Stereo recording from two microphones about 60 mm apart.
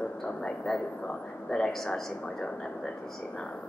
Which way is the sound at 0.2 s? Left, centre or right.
Centre.